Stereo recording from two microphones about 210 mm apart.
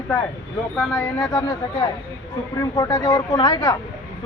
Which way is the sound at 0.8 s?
10° left (ahead or behind).